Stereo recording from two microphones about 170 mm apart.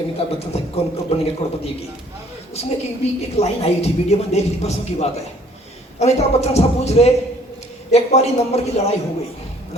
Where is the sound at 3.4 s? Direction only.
40° left (ahead or behind).